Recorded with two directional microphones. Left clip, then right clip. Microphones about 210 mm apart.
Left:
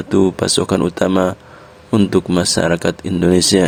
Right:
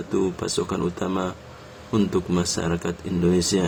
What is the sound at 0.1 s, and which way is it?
Speech, 45° left (ahead or behind).